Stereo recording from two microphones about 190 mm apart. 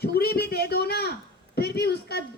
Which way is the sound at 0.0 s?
55° left (ahead or behind).